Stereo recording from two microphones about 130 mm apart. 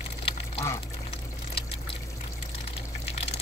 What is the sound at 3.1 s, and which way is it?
Water, 50° left (ahead or behind).